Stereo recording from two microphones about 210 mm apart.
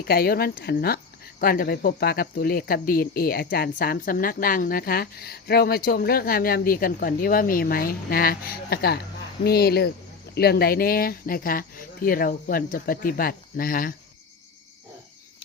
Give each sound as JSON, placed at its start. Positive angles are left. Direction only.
{"t": 0.1, "sound": "speech", "side_deg": 45}